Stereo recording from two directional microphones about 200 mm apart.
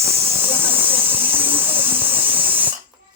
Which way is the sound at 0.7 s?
25° right (ahead or behind).